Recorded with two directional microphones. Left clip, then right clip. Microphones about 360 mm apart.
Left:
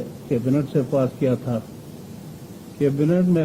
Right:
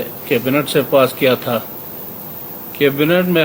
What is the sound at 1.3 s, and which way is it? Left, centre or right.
Speech, centre.